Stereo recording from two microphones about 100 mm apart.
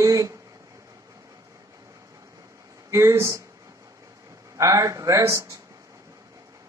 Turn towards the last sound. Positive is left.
turn(degrees=-30)  # may be behind; listen again after turning